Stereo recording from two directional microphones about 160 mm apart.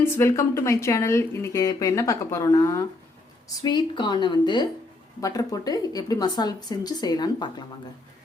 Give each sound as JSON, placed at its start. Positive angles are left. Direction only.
{"t": 0.0, "sound": "speech", "side_deg": 15}